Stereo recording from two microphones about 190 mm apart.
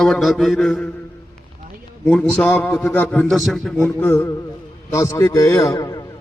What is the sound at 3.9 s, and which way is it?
A man's voice, 10° left (ahead or behind).